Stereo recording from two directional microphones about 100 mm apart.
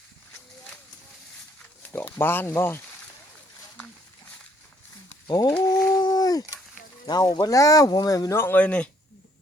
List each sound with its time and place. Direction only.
1.9 s speech: 25° left (ahead or behind)
5.6 s dog: 40° left (ahead or behind)
7.1 s speech: 45° left (ahead or behind)
8.4 s speech: 20° left (ahead or behind)